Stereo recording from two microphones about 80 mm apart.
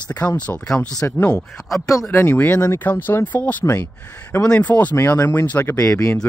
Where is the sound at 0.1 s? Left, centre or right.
Left.